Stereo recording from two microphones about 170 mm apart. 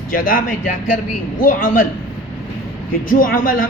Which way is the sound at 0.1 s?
55° left (ahead or behind).